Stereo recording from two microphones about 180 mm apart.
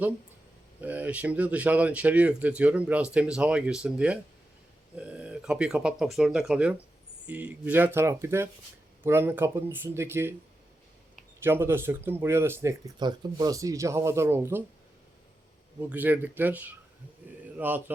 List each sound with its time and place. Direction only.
0.8 s speech: 10° right (ahead or behind)
11.4 s speech: 15° right (ahead or behind)
15.9 s speech: 10° right (ahead or behind)